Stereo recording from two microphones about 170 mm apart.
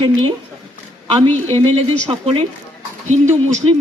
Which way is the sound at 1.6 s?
30° right (ahead or behind).